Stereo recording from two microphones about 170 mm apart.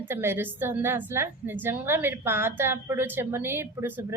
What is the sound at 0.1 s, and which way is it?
A woman's voice, 15° right (ahead or behind).